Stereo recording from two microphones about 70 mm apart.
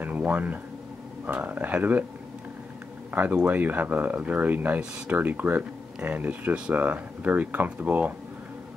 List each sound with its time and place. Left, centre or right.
0.0 s a sound: right
1.2 s speech: right
3.1 s speech: right